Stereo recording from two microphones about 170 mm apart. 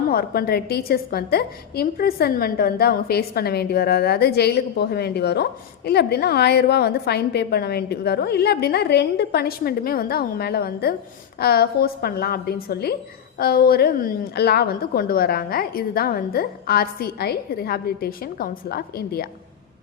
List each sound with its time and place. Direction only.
0.1 s a woman's voice: 65° left (ahead or behind)